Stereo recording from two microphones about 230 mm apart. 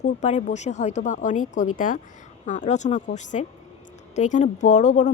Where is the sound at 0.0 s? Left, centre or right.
Left.